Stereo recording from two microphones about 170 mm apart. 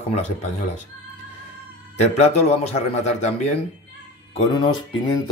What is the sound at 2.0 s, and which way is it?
Speech, 40° left (ahead or behind).